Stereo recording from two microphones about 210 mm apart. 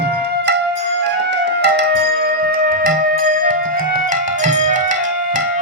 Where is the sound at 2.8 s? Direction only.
45° right (ahead or behind).